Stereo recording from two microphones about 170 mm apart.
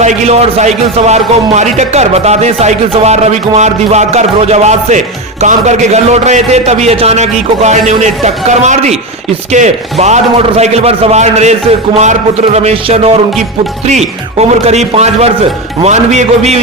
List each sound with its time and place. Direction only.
0.0 s speech: 40° right (ahead or behind)